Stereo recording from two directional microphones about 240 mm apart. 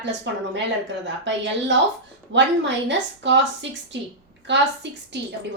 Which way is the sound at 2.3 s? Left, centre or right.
Right.